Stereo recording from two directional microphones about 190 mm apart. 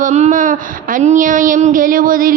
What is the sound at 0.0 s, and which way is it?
Speech, 40° right (ahead or behind).